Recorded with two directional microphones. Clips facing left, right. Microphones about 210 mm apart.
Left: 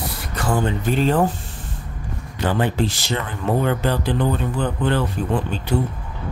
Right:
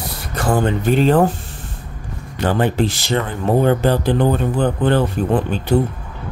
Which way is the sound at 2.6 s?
55° right (ahead or behind).